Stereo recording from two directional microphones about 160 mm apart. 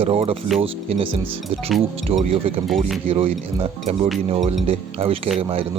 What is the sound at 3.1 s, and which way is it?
Speech, 35° right (ahead or behind).